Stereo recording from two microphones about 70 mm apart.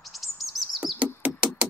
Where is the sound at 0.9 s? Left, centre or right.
Centre.